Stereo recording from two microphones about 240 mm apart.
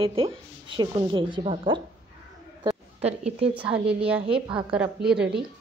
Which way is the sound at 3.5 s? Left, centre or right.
Centre.